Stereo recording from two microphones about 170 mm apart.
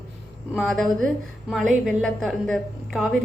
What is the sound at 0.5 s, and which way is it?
Speech, centre (ahead or behind).